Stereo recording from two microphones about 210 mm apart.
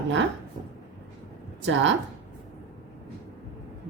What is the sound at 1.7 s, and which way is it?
Speech, 60° right (ahead or behind).